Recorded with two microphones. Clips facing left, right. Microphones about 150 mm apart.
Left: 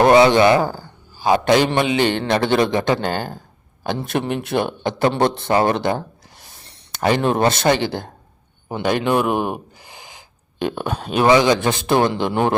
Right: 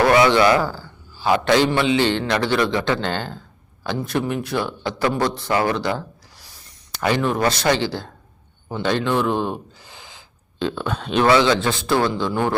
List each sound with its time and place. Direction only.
0.0 s a man's voice: 25° left (ahead or behind)
7.0 s a man's voice: 25° left (ahead or behind)